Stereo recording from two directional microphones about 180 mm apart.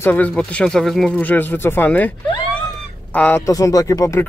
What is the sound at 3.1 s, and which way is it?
Speech, 10° left (ahead or behind).